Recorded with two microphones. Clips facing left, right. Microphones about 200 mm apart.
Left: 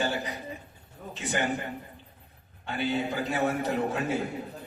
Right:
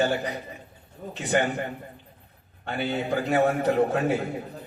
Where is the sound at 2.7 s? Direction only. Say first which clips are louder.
Right 2 dB; 60° right (ahead or behind).